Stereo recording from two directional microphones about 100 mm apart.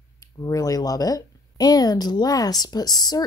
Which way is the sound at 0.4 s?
35° left (ahead or behind).